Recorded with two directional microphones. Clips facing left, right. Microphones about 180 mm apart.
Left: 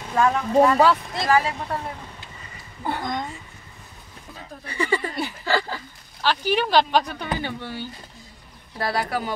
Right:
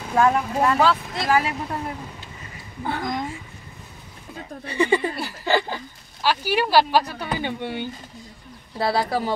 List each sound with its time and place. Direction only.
0.0 s speech: 10° right (ahead or behind)
3.0 s speech: centre (ahead or behind)
4.6 s speech: 20° right (ahead or behind)
5.4 s a sound: 20° right (ahead or behind)
6.2 s speech: 10° right (ahead or behind)
7.4 s speech: 20° right (ahead or behind)